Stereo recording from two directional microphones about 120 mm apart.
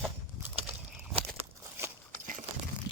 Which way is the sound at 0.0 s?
15° right (ahead or behind).